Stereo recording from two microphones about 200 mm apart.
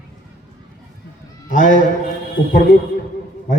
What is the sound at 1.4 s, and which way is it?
Speech, 40° left (ahead or behind).